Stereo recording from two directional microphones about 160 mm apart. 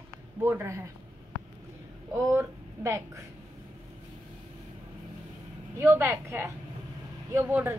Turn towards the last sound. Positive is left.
turn(degrees=-15)  # may be behind; listen again after turning